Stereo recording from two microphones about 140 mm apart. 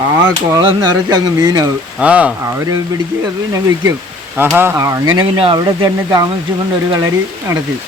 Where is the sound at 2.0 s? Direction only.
10° right (ahead or behind).